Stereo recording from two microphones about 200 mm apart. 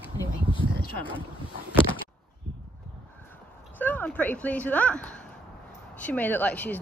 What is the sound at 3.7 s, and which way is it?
Speech, 10° left (ahead or behind).